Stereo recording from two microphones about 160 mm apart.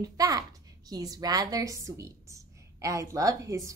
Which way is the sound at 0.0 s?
20° right (ahead or behind).